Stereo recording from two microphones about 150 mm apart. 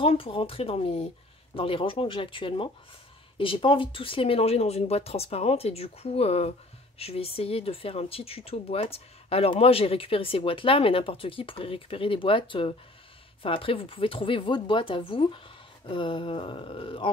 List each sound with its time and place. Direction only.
0.0 s speech: 40° left (ahead or behind)